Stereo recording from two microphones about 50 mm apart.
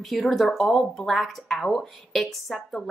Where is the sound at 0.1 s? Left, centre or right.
Centre.